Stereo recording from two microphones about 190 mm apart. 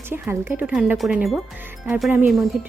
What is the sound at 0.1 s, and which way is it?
A woman's voice, 10° right (ahead or behind).